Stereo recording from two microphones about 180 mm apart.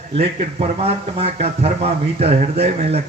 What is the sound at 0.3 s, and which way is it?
Speech, 40° right (ahead or behind).